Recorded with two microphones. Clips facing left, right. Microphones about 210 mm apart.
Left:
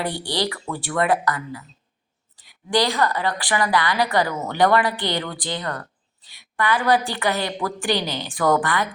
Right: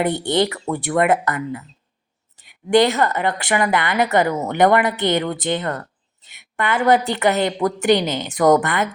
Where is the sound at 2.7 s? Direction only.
25° right (ahead or behind).